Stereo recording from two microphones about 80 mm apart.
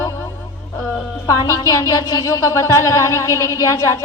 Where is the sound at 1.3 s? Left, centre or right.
Left.